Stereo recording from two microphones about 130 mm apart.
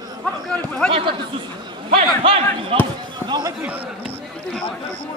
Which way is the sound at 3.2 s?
35° right (ahead or behind).